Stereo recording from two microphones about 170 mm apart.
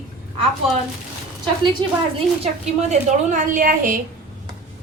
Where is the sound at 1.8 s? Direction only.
25° right (ahead or behind).